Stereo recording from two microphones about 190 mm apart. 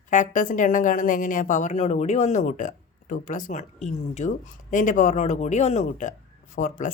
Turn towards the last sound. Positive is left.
turn(degrees=45)  # may be behind; listen again after turning